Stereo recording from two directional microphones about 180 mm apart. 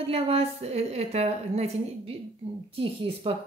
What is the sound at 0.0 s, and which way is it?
Speech, 35° right (ahead or behind).